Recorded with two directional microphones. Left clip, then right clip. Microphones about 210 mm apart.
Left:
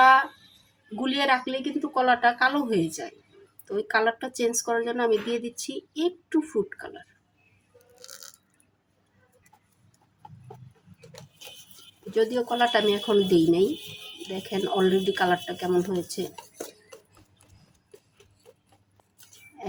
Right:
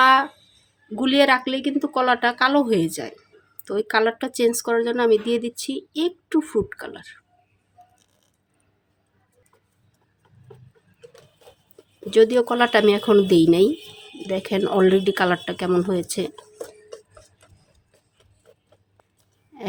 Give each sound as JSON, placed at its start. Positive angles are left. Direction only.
{"t": 0.0, "sound": "a sound", "side_deg": -50}
{"t": 1.0, "sound": "speech", "side_deg": -55}
{"t": 7.9, "sound": "burping", "side_deg": 15}
{"t": 12.1, "sound": "speech", "side_deg": -50}